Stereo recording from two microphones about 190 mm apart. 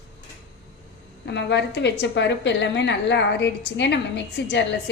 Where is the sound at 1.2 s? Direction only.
65° left (ahead or behind).